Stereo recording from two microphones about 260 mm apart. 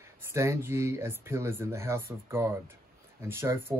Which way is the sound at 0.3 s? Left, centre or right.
Centre.